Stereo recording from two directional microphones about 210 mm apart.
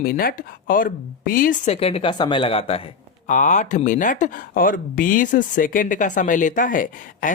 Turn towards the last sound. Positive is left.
turn(degrees=40)  # may be behind; listen again after turning